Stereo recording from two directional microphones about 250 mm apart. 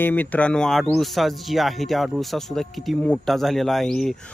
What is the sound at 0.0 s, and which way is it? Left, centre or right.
Speech, centre.